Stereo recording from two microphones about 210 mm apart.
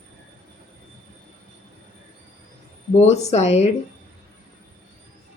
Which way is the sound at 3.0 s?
30° left (ahead or behind).